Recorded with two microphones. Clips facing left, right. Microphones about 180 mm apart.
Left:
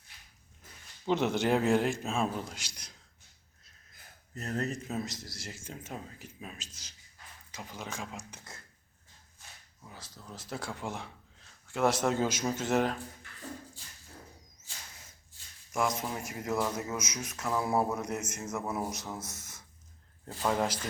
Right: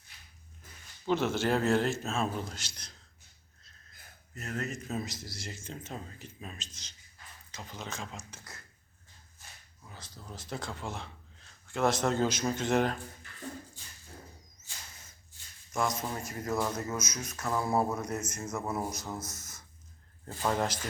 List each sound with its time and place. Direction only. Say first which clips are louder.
1.0 s speech: left 1 dB; 20° left (ahead or behind)
4.4 s speech: left 3 dB; 35° left (ahead or behind)
4.9 s speech: even; centre (ahead or behind); by 8.5 s 15° left (ahead or behind)
9.8 s a sound: left 1 dB; 10° left (ahead or behind)
10.2 s speech: even; centre (ahead or behind)
15.7 s speech: left 1 dB; 10° left (ahead or behind)
19.3 s a sound: even; 5° left (ahead or behind)
20.2 s speech: left 1 dB; centre (ahead or behind)